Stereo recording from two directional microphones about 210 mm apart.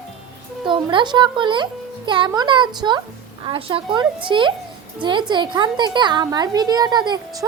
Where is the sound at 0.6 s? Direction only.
25° right (ahead or behind).